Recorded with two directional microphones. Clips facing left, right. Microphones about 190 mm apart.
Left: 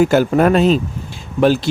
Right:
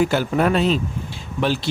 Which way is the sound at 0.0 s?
45° left (ahead or behind).